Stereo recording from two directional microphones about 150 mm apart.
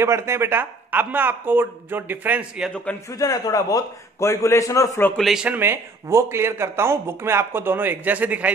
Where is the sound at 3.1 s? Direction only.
25° left (ahead or behind).